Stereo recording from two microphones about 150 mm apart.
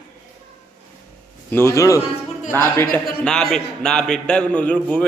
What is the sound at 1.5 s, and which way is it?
A man's voice, 15° left (ahead or behind).